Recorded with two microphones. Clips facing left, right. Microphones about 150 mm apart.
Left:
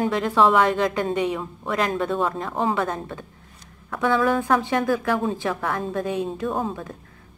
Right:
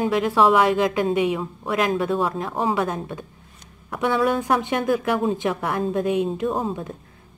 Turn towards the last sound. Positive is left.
turn(degrees=-20)  # may be behind; listen again after turning